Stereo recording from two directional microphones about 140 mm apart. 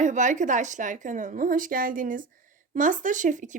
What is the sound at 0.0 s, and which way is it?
A woman's voice, 60° right (ahead or behind).